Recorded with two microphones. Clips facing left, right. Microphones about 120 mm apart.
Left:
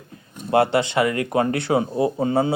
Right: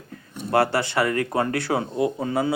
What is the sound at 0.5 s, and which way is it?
Speech, 20° left (ahead or behind).